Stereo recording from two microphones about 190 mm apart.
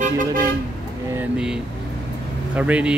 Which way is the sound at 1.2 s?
5° right (ahead or behind).